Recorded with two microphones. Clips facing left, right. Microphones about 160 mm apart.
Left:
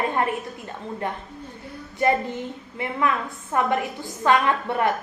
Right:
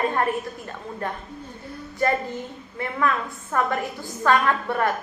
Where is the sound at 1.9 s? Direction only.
20° left (ahead or behind).